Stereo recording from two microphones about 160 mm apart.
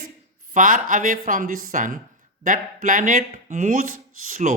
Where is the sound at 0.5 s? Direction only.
55° right (ahead or behind).